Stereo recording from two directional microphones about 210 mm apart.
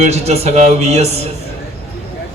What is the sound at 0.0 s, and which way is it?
A man's voice, 30° right (ahead or behind).